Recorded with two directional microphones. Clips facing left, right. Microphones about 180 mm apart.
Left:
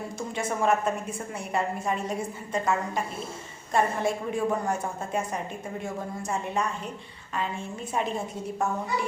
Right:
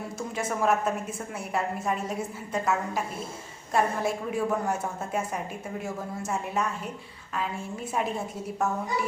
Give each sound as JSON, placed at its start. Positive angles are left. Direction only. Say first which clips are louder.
{"t": 0.2, "sound": "a woman's voice", "louder": "even", "side_deg": -5}